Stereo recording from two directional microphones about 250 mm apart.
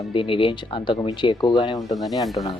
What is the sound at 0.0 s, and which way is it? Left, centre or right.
Speech, left.